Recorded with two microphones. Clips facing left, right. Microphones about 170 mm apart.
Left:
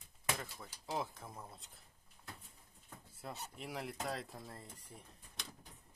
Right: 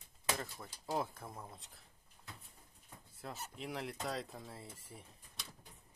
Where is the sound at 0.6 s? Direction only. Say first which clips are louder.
Right 3 dB; 5° right (ahead or behind).